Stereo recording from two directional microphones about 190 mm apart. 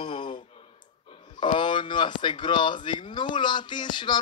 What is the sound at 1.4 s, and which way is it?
Speech, 25° left (ahead or behind).